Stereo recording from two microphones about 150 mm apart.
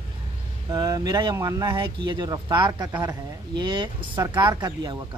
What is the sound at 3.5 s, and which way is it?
Speech, 30° right (ahead or behind).